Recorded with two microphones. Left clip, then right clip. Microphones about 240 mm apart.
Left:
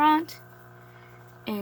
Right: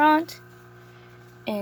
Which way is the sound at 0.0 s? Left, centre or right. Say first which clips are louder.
Right 2 dB; centre.